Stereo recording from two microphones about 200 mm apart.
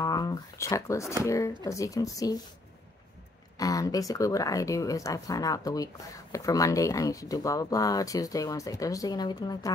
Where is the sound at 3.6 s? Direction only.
15° left (ahead or behind).